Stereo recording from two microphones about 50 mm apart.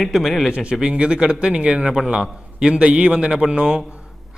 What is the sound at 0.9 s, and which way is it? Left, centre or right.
A man's voice, right.